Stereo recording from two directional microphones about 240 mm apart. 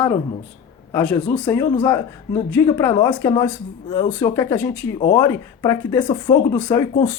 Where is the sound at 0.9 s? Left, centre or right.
Centre.